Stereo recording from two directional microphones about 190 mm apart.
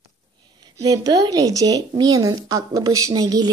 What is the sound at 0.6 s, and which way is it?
Speech, 20° right (ahead or behind).